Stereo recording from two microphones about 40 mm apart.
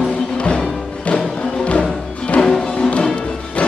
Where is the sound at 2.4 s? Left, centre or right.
Centre.